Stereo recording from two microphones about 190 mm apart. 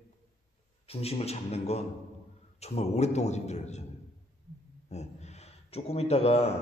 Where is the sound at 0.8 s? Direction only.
30° left (ahead or behind).